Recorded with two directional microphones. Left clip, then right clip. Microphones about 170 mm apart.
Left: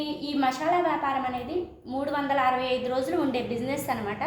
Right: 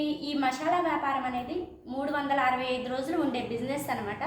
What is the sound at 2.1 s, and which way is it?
A woman's voice, 30° left (ahead or behind).